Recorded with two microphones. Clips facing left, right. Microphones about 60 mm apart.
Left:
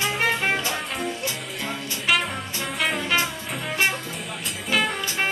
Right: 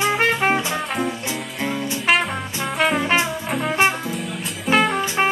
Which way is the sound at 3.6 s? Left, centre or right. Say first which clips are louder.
Right 5 dB; right.